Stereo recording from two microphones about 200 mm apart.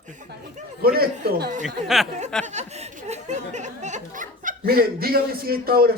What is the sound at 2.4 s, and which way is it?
Speech, 35° right (ahead or behind).